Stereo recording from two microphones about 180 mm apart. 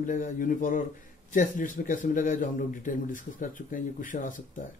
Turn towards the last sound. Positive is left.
turn(degrees=45)  # may be behind; listen again after turning